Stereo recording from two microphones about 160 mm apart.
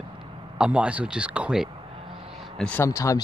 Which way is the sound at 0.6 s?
5° right (ahead or behind).